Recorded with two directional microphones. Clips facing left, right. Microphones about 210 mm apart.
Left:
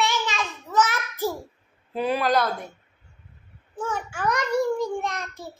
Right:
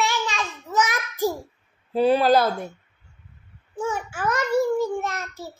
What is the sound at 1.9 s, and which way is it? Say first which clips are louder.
Speech: right 5 dB; 30° right (ahead or behind).